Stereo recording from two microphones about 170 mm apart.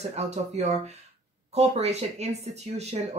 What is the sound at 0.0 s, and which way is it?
Speech, 40° right (ahead or behind).